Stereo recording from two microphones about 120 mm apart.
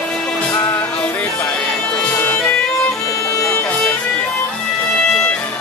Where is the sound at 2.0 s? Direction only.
15° left (ahead or behind).